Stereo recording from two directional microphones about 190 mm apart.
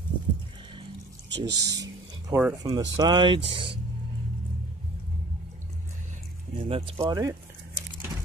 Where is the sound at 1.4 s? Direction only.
20° right (ahead or behind).